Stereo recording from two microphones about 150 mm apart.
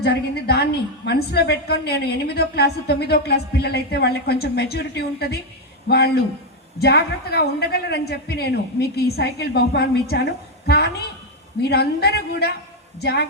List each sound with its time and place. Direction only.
0.0 s a woman's voice: 90° left